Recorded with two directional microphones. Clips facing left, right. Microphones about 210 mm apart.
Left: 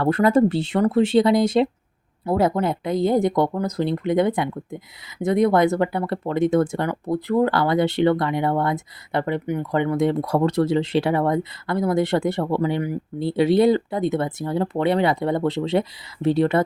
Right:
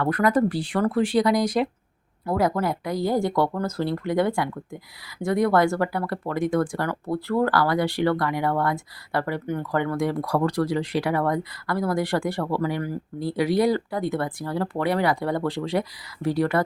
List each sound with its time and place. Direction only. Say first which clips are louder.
0.0 s speech: left 4 dB; 25° left (ahead or behind)